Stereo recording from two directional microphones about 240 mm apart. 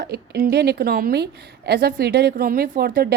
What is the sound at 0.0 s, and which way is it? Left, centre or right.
A woman's voice, right.